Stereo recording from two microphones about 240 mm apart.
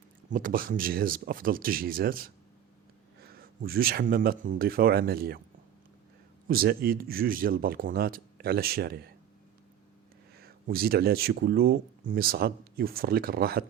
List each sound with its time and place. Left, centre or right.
0.3 s speech: right
6.5 s speech: right
10.3 s speech: right